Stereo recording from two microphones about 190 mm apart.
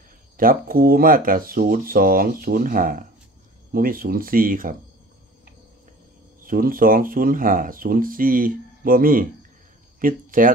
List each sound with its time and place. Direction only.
0.4 s speech: 50° right (ahead or behind)
6.4 s speech: 50° right (ahead or behind)